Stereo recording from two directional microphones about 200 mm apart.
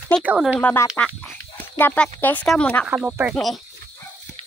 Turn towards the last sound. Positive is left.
turn(degrees=0)  # may be behind; listen again after turning